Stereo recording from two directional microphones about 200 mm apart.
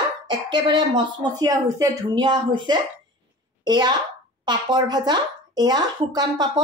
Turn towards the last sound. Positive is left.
turn(degrees=-20)  # may be behind; listen again after turning